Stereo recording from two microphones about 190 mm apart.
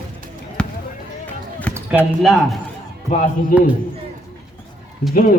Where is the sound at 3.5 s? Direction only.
50° left (ahead or behind).